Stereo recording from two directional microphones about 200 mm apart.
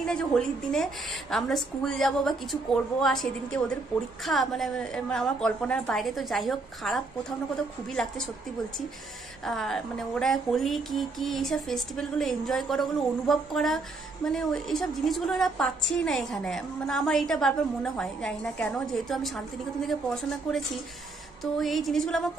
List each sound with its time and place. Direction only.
0.0 s a woman's voice: 5° left (ahead or behind)
9.4 s a woman's voice: centre (ahead or behind)